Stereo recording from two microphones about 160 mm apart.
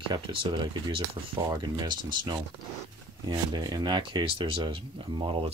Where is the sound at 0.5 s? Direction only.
30° right (ahead or behind).